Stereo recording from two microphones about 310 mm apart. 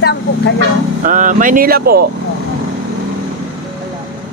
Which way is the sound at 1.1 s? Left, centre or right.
Right.